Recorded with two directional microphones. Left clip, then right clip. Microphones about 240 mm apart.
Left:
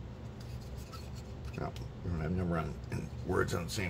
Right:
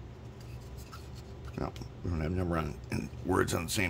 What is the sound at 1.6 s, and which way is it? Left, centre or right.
Speech, right.